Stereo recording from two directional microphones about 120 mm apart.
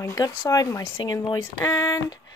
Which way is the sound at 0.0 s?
30° left (ahead or behind).